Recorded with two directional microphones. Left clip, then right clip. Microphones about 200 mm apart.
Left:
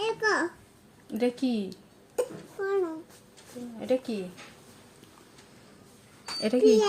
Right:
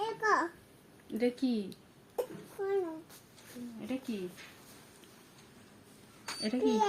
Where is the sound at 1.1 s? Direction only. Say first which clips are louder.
Left 4 dB; 60° left (ahead or behind).